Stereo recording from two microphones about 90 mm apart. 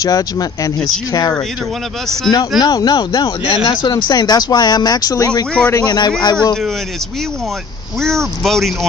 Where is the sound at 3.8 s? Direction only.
55° left (ahead or behind).